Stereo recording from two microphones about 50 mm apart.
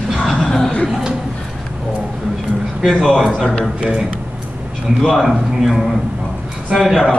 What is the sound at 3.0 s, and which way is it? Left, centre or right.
Speech, centre.